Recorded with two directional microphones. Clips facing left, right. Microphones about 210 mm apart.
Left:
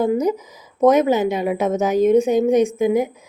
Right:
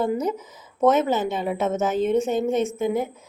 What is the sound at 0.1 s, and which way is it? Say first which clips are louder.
A woman's voice: left 6 dB; 10° left (ahead or behind).